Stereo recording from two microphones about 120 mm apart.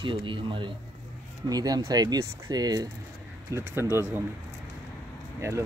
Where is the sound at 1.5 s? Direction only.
30° right (ahead or behind).